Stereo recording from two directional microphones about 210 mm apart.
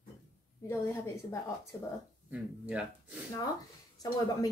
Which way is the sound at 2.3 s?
5° right (ahead or behind).